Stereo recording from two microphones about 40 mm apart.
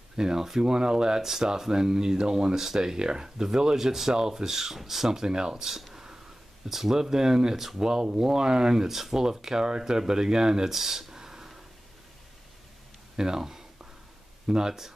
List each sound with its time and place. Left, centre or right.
0.2 s speech: centre
13.1 s speech: centre